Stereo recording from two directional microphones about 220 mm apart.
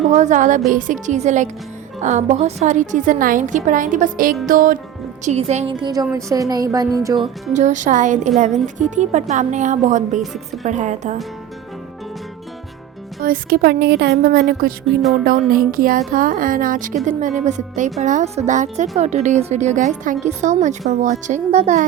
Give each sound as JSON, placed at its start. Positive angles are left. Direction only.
{"t": 0.0, "sound": "a woman's voice", "side_deg": -30}
{"t": 7.5, "sound": "a woman's voice", "side_deg": -35}
{"t": 10.2, "sound": "a woman's voice", "side_deg": 0}
{"t": 10.6, "sound": "a woman's voice", "side_deg": -35}
{"t": 13.2, "sound": "a woman's voice", "side_deg": -40}